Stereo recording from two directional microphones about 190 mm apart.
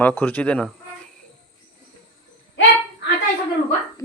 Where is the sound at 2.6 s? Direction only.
80° left.